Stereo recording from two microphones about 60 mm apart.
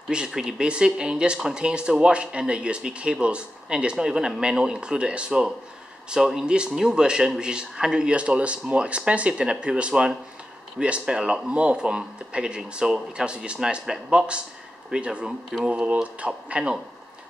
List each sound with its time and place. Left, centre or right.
0.3 s speech: centre